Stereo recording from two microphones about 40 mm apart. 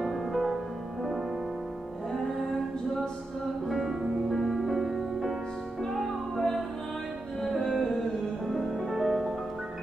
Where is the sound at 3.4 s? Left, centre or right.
Centre.